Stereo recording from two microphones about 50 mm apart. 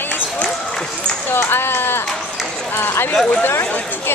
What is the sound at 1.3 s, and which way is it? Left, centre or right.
Run, left.